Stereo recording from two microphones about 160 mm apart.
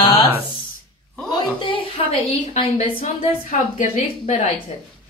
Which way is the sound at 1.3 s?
30° left (ahead or behind).